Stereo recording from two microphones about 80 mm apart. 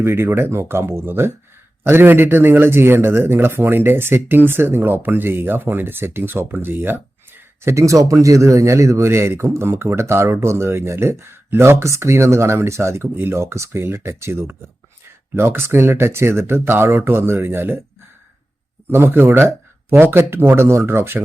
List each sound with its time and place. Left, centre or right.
0.0 s speech: right
18.9 s speech: right